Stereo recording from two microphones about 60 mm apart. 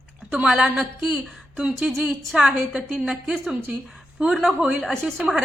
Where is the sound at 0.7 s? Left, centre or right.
Centre.